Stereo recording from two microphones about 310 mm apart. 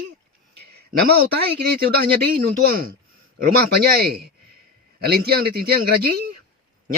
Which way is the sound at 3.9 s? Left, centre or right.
Right.